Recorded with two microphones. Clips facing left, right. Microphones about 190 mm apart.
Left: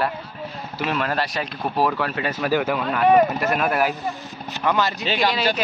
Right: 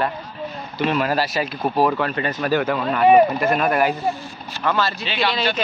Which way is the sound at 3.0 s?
10° right (ahead or behind).